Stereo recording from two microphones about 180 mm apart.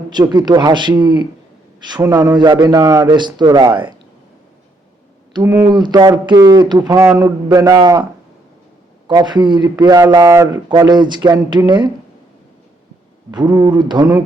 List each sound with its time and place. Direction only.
0.1 s speech: 25° right (ahead or behind)
5.3 s speech: 15° right (ahead or behind)
9.0 s speech: 25° right (ahead or behind)
13.3 s speech: 25° right (ahead or behind)